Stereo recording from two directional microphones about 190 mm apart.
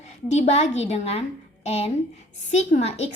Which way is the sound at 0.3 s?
35° left (ahead or behind).